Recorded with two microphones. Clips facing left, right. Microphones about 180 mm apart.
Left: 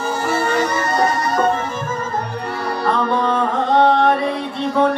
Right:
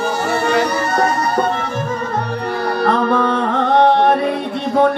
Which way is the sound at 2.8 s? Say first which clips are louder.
Right 3 dB; 65° right (ahead or behind).